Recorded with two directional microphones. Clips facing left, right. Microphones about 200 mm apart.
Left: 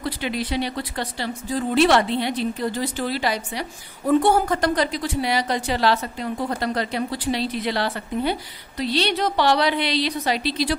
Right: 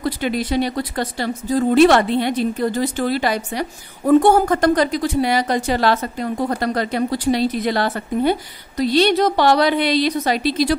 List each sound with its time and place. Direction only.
0.0 s speech: 45° right (ahead or behind)